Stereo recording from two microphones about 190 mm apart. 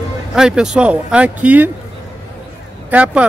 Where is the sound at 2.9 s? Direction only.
5° right (ahead or behind).